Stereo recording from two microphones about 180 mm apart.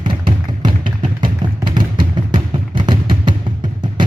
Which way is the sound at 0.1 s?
25° right (ahead or behind).